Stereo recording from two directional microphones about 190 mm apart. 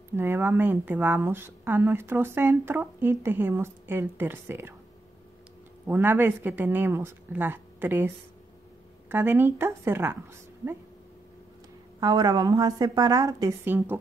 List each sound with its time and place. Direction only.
0.1 s speech: 15° right (ahead or behind)
5.9 s speech: 10° right (ahead or behind)
9.1 s speech: 10° right (ahead or behind)
12.0 s a woman's voice: 20° right (ahead or behind)